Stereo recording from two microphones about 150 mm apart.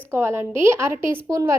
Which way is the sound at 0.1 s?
15° right (ahead or behind).